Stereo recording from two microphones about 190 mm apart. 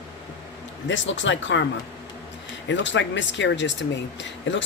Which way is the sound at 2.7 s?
70° left (ahead or behind).